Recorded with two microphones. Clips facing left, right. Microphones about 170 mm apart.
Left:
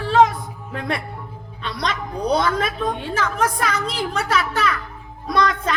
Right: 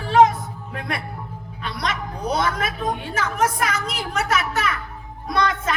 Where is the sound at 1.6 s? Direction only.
30° left (ahead or behind).